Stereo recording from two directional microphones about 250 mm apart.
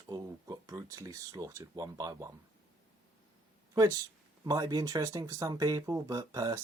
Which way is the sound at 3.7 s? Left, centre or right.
Centre.